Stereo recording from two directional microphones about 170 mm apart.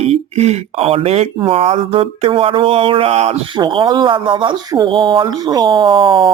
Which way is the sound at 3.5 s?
25° right (ahead or behind).